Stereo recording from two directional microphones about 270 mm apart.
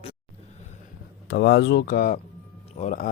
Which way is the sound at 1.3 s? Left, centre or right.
Left.